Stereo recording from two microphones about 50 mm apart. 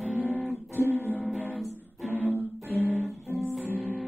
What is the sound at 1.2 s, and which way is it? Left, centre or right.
Music, right.